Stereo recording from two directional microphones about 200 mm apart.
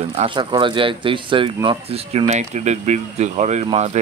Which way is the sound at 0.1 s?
25° right (ahead or behind).